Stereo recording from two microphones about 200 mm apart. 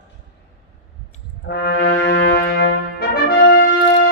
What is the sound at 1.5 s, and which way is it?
Brass instrument, 60° left (ahead or behind).